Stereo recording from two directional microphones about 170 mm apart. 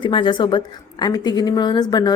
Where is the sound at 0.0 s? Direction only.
30° left (ahead or behind).